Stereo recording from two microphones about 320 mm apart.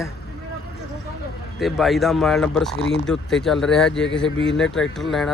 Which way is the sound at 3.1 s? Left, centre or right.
Centre.